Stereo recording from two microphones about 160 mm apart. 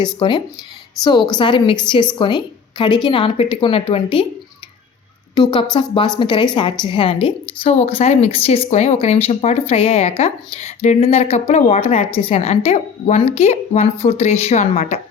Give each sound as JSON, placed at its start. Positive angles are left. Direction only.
{"t": 0.0, "sound": "a woman's voice", "side_deg": 30}
{"t": 5.3, "sound": "a woman's voice", "side_deg": 25}